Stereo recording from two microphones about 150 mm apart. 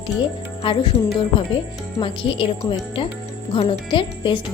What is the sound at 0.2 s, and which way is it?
Speech, 35° left (ahead or behind).